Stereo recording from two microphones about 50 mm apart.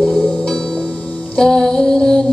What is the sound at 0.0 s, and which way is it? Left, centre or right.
Music, centre.